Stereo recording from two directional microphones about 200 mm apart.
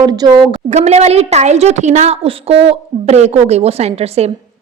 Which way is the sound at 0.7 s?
30° right (ahead or behind).